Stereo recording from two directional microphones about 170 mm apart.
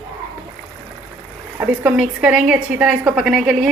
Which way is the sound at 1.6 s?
10° right (ahead or behind).